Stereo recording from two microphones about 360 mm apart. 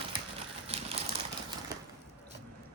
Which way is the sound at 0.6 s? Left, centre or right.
Centre.